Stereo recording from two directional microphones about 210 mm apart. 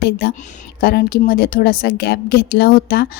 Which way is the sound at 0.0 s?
45° left (ahead or behind).